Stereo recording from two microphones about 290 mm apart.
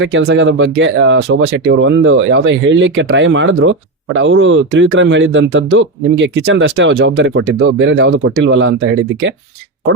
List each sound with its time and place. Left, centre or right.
0.0 s speech: right